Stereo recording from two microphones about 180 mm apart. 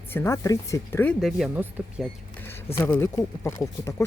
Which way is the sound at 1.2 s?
Centre (ahead or behind).